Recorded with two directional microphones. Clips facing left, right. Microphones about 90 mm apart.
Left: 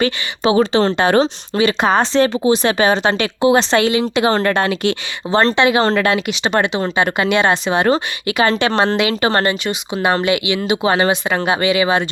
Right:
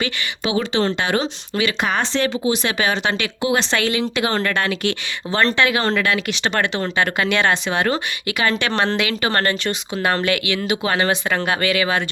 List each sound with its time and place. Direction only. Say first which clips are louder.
0.0 s speech: left 7 dB; 35° left (ahead or behind)
6.2 s speech: left 4 dB; 20° left (ahead or behind)